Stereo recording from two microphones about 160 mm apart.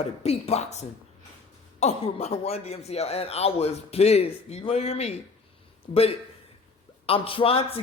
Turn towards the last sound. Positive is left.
turn(degrees=35)  # may be behind; listen again after turning